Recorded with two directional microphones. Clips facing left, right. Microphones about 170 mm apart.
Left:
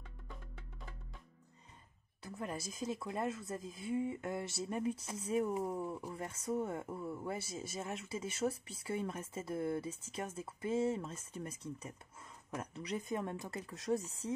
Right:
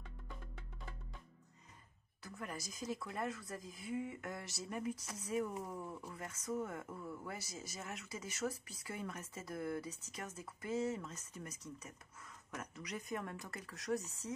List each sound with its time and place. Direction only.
2.2 s speech: 25° left (ahead or behind)